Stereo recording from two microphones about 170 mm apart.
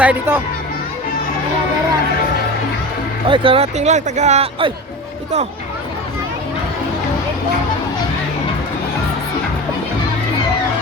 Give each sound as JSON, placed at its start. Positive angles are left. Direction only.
{"t": 0.0, "sound": "speech", "side_deg": -10}
{"t": 3.2, "sound": "speech", "side_deg": -30}